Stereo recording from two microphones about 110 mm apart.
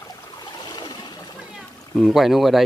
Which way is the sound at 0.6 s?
40° left (ahead or behind).